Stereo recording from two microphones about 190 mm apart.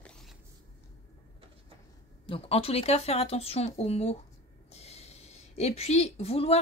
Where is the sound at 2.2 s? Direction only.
30° left (ahead or behind).